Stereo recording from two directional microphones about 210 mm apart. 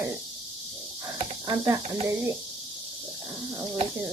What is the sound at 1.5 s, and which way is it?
Speech, 15° right (ahead or behind).